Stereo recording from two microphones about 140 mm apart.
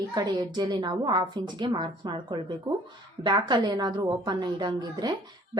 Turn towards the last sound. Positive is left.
turn(degrees=-30)  # may be behind; listen again after turning